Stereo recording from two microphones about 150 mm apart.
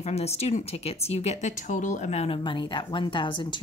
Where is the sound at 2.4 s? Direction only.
30° left (ahead or behind).